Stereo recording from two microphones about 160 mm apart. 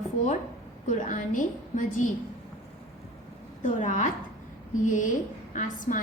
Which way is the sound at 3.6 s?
50° left (ahead or behind).